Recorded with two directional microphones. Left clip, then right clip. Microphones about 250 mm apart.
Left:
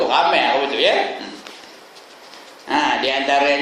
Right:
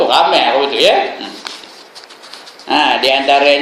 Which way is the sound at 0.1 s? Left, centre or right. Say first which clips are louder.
Right 5 dB; centre.